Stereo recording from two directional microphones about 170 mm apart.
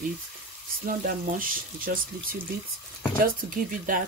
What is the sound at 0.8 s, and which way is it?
Speech, 55° right (ahead or behind).